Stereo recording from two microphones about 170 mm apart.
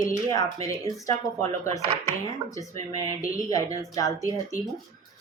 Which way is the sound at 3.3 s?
20° left (ahead or behind).